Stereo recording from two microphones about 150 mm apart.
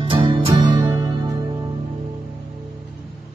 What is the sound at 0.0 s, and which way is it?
Music, 35° right (ahead or behind).